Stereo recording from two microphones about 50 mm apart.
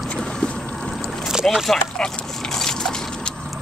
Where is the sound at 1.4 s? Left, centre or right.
Centre.